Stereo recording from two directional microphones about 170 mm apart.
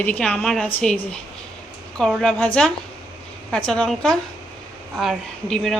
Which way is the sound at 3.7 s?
5° left (ahead or behind).